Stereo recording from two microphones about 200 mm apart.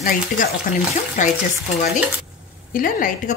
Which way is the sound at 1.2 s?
35° left (ahead or behind).